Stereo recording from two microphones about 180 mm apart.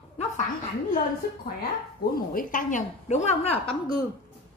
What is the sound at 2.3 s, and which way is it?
A woman's voice, 45° left (ahead or behind).